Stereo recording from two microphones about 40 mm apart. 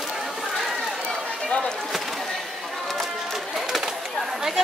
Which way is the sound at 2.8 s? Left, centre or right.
Centre.